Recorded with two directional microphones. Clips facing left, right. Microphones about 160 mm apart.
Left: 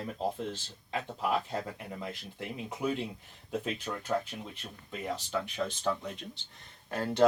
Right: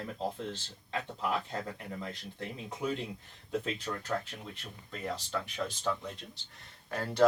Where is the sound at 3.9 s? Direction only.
10° left (ahead or behind).